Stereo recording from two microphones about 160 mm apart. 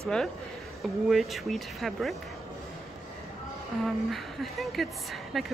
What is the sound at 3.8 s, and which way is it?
Speech, centre (ahead or behind).